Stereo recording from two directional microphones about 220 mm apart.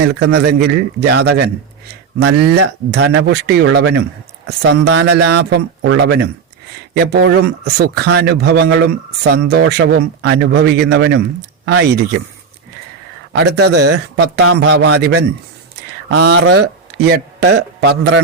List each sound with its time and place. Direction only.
0.0 s speech: 50° right (ahead or behind)
2.6 s speech: 50° right (ahead or behind)
13.3 s a man's voice: 50° right (ahead or behind)